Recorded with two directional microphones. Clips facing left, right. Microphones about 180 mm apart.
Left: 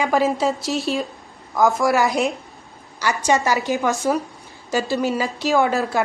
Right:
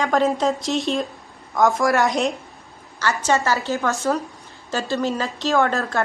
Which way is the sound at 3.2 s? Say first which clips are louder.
Left 2 dB; 15° left (ahead or behind).